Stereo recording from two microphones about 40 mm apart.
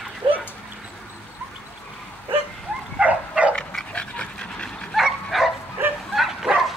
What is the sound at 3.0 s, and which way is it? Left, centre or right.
Dog, right.